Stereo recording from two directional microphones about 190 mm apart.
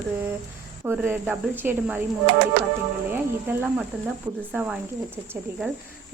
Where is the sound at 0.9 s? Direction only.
10° right (ahead or behind).